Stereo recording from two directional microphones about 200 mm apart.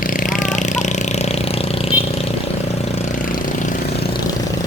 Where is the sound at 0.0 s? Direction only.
40° left (ahead or behind).